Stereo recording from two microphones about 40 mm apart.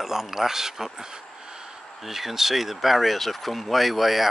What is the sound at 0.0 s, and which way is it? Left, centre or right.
Speech, centre.